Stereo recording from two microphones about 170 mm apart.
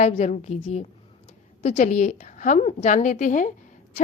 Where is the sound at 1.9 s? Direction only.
45° left (ahead or behind).